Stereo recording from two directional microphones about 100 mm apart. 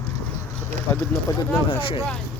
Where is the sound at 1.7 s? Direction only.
60° left (ahead or behind).